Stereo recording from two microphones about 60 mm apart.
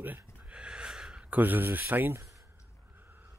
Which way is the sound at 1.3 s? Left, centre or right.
Right.